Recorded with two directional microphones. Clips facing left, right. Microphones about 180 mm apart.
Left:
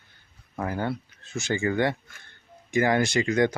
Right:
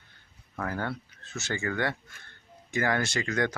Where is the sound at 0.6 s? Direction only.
20° left (ahead or behind).